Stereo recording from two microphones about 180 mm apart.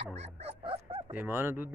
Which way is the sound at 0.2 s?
35° right (ahead or behind).